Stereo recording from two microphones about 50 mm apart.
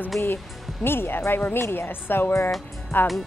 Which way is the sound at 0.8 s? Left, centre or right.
Left.